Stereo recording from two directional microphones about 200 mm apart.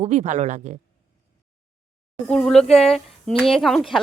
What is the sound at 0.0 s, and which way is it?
Speech, 35° right (ahead or behind).